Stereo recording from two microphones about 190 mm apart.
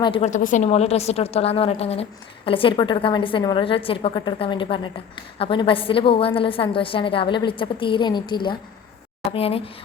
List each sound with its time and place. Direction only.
0.0 s a woman's voice: 30° left (ahead or behind)